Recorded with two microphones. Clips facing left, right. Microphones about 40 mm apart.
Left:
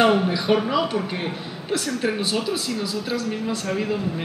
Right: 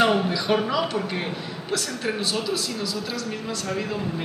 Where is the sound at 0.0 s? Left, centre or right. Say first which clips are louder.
Left 2 dB; centre.